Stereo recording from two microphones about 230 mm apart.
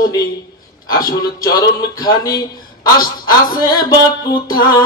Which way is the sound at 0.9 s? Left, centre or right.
Centre.